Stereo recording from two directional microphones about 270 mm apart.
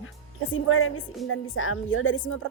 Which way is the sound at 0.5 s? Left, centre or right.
Left.